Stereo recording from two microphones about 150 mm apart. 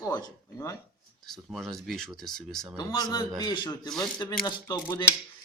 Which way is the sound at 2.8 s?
25° left (ahead or behind).